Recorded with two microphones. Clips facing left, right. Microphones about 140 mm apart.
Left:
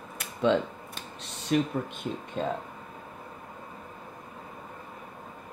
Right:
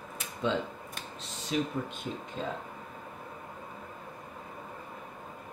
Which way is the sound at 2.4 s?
50° left (ahead or behind).